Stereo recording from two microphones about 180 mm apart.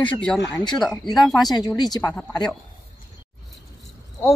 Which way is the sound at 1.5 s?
20° left (ahead or behind).